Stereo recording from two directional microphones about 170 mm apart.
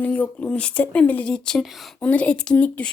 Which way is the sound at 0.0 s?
10° left (ahead or behind).